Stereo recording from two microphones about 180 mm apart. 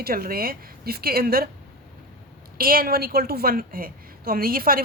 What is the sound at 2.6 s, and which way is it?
A woman's voice, 55° right (ahead or behind).